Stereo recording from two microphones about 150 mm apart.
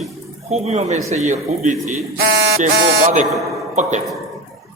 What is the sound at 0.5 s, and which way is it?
A man's voice, 45° right (ahead or behind).